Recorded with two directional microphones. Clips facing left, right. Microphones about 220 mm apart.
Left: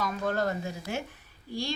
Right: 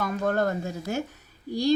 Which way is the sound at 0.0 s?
50° right (ahead or behind).